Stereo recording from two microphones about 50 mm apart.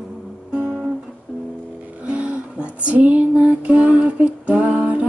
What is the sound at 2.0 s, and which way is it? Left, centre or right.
Music, right.